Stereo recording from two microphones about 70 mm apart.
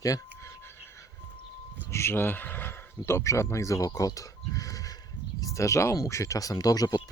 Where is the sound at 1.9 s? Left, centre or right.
Left.